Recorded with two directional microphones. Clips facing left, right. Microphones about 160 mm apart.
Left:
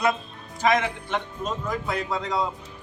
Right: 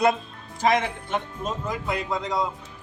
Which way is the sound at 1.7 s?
10° right (ahead or behind).